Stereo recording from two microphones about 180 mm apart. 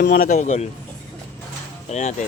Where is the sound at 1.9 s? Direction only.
40° left (ahead or behind).